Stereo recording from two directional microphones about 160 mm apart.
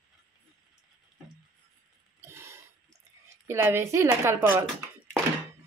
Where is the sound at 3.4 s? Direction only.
15° right (ahead or behind).